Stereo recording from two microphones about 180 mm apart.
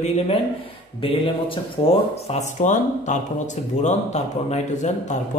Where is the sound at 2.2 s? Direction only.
40° left (ahead or behind).